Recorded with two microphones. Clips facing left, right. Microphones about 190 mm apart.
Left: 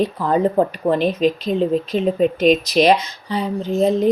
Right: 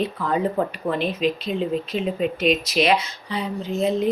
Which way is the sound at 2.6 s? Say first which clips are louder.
Left 5 dB; 35° left (ahead or behind).